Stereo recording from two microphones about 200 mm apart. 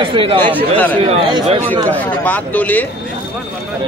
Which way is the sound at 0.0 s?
25° right (ahead or behind).